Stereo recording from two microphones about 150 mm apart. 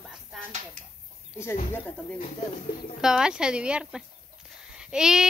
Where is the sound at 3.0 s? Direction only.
5° right (ahead or behind).